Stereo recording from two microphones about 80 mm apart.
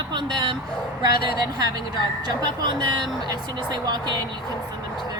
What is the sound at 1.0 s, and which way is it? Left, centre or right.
A woman's voice, right.